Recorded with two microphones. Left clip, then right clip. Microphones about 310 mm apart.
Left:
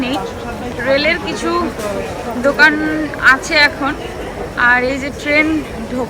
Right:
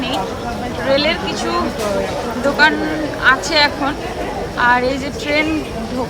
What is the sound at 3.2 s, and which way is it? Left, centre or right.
Speech, centre.